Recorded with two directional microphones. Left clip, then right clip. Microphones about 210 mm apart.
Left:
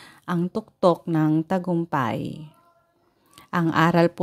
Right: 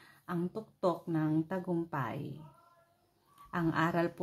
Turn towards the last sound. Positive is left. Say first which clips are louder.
# left 12 dB
turn(degrees=45)  # may be behind; listen again after turning